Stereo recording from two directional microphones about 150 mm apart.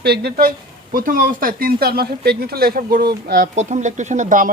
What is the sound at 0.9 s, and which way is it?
Speech, 70° right (ahead or behind).